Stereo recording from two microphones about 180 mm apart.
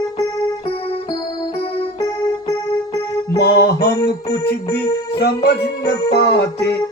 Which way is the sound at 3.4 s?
60° left (ahead or behind).